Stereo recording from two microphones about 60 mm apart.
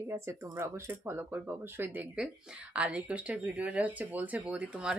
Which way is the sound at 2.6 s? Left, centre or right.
Right.